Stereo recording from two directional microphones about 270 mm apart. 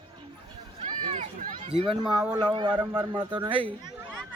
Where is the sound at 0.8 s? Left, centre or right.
Right.